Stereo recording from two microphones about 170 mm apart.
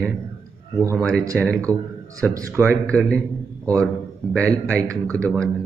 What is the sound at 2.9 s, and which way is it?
A man's voice, 5° left (ahead or behind).